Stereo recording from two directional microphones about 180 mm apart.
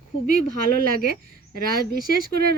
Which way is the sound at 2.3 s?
60° right (ahead or behind).